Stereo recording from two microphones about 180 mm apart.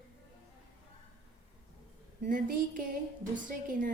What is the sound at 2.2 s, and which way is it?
A woman's voice, 45° right (ahead or behind).